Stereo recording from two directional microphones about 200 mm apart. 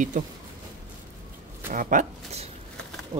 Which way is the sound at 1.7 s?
40° right (ahead or behind).